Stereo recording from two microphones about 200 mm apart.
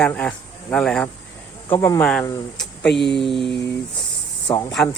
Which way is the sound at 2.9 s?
60° left (ahead or behind).